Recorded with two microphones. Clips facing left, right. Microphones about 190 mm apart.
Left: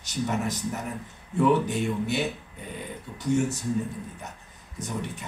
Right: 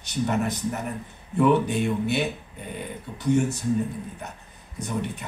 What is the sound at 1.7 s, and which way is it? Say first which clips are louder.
Speech: right 3 dB; 60° right (ahead or behind).